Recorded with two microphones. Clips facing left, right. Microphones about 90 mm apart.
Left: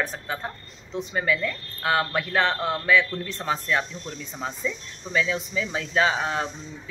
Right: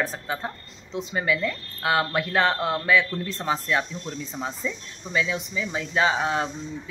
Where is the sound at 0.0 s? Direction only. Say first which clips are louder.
Right 1 dB; 25° right (ahead or behind).